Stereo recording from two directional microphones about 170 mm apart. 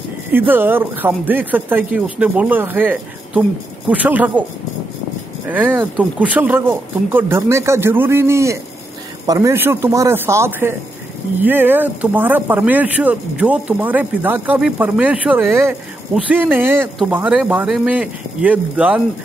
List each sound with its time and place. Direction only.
0.3 s speech: 10° right (ahead or behind)
5.5 s speech: 10° right (ahead or behind)